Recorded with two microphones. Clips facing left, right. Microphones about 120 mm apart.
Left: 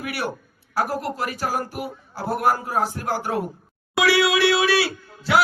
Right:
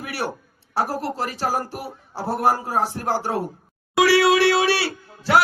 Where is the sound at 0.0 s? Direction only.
30° right (ahead or behind).